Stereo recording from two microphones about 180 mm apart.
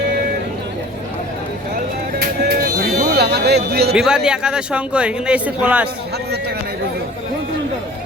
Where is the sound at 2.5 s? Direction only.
55° right (ahead or behind).